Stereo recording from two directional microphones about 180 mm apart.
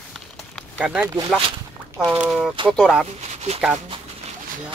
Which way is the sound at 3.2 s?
40° right (ahead or behind).